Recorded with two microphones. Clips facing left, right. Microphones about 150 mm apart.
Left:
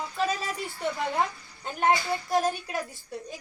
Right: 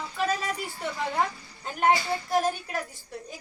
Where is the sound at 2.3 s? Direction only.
Centre (ahead or behind).